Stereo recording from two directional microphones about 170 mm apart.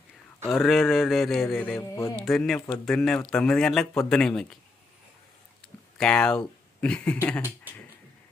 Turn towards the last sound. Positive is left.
turn(degrees=10)  # may be behind; listen again after turning